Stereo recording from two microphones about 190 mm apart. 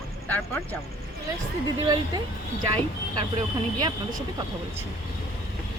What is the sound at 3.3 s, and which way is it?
Speech, 20° right (ahead or behind).